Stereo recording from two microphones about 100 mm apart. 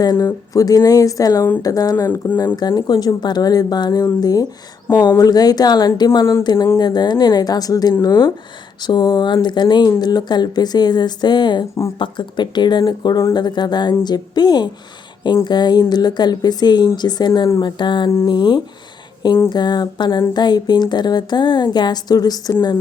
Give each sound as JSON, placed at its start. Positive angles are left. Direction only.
{"t": 0.0, "sound": "speech", "side_deg": 40}
{"t": 2.0, "sound": "speech", "side_deg": 20}
{"t": 2.6, "sound": "speech", "side_deg": 40}